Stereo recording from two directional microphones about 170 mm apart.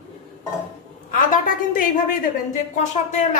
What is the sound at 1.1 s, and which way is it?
A woman's voice, 50° left (ahead or behind).